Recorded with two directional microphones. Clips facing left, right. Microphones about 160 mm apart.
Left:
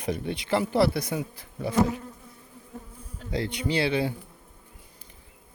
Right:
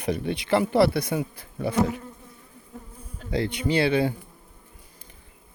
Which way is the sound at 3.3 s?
60° right (ahead or behind).